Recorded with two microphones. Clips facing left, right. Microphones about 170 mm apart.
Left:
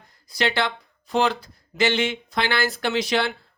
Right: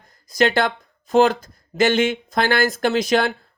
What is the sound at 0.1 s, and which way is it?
Speech, 45° right (ahead or behind).